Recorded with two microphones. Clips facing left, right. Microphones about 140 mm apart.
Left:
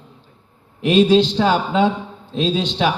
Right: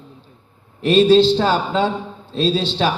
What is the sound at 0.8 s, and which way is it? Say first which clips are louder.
A man's voice: right 2 dB; 15° left (ahead or behind).